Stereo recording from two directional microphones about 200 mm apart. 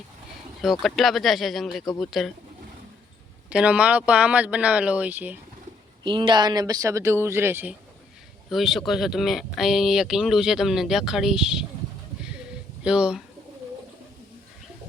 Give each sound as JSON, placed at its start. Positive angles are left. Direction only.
{"t": 0.6, "sound": "speech", "side_deg": 0}
{"t": 3.5, "sound": "speech", "side_deg": -5}
{"t": 6.0, "sound": "speech", "side_deg": -25}
{"t": 12.8, "sound": "speech", "side_deg": -5}